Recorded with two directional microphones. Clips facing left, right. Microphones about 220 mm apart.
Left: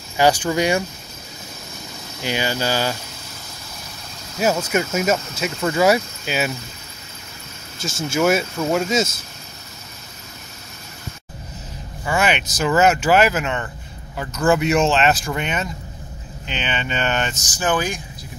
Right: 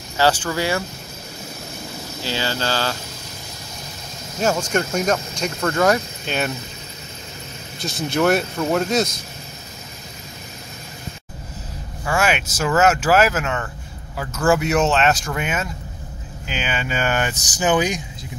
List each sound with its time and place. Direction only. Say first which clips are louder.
0.2 s a sound: left 2 dB; 15° left (ahead or behind)
2.2 s a sound: left 2 dB; 15° left (ahead or behind)
4.4 s speech: left 1 dB; 5° left (ahead or behind)
7.8 s speech: even; centre (ahead or behind)
12.0 s vehicle: even; 5° left (ahead or behind)
12.5 s speech: left 1 dB; centre (ahead or behind); by 18.0 s 20° right (ahead or behind)